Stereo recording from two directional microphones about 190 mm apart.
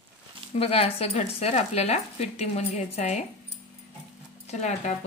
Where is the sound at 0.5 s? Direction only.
30° left (ahead or behind).